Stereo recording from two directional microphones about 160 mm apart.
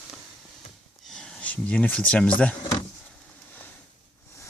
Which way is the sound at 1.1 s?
5° left (ahead or behind).